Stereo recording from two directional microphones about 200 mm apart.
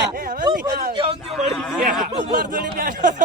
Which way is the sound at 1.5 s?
Centre (ahead or behind).